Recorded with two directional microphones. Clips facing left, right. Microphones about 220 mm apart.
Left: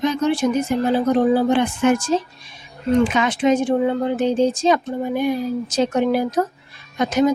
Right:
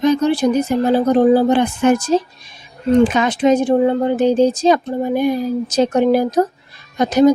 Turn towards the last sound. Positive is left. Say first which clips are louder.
# right 5 dB
turn(degrees=-35)  # may be behind; listen again after turning